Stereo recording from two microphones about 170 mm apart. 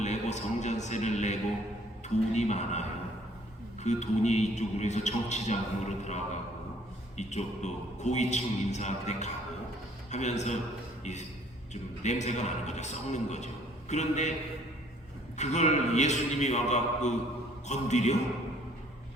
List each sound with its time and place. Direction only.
0.0 s a sound: 45° left (ahead or behind)
2.3 s a man's voice: 45° left (ahead or behind)
3.8 s a man's voice: 45° left (ahead or behind)
15.4 s a man's voice: 45° left (ahead or behind)